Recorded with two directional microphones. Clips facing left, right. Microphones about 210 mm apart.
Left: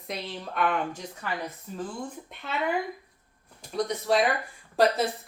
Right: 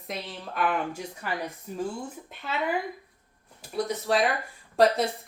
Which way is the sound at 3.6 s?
Centre (ahead or behind).